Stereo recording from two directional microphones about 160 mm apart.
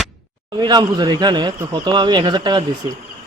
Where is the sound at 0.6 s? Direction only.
25° right (ahead or behind).